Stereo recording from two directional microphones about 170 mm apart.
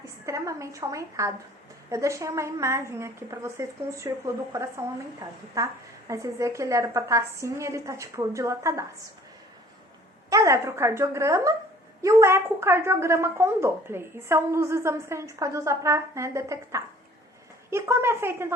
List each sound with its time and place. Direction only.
0.3 s a woman's voice: 20° right (ahead or behind)
5.2 s a woman's voice: 25° right (ahead or behind)
10.2 s a woman's voice: 20° right (ahead or behind)